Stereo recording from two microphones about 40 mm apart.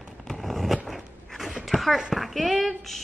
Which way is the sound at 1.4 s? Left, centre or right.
Centre.